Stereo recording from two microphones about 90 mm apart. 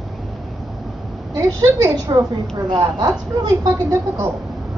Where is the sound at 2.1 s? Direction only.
55° right (ahead or behind).